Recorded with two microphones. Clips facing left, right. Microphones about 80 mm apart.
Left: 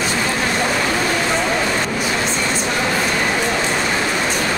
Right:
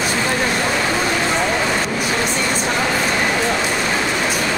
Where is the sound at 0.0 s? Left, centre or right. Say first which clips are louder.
Right 1 dB; centre.